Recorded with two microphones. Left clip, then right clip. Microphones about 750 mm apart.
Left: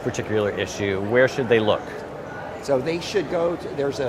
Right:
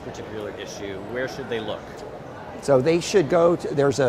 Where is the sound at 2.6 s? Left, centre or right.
Right.